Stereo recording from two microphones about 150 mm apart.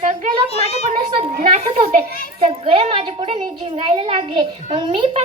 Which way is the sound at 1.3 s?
65° right (ahead or behind).